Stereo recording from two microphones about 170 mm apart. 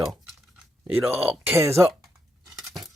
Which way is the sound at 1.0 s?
Centre (ahead or behind).